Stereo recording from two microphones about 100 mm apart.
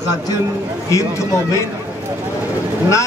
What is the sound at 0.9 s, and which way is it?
Speech, 30° left (ahead or behind).